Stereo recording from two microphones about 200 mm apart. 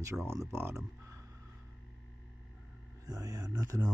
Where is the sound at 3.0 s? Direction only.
20° right (ahead or behind).